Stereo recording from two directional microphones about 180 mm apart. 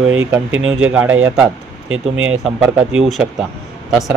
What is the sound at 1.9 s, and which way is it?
Speech, 90° right.